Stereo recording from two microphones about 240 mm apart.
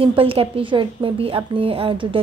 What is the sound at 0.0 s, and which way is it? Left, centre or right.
A woman's voice, right.